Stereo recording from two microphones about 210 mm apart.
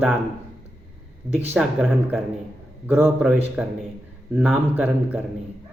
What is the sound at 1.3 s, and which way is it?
A man's voice, 10° right (ahead or behind).